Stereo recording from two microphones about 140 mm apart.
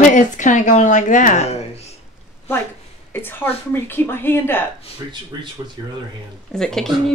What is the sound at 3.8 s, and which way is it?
Music, 15° left (ahead or behind).